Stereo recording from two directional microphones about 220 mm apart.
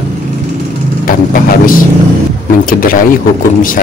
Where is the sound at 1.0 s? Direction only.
40° left (ahead or behind).